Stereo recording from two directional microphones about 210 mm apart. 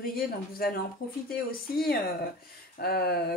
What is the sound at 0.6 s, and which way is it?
Speech, 45° left (ahead or behind).